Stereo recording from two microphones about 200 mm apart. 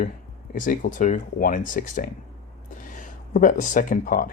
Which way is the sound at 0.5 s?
40° left (ahead or behind).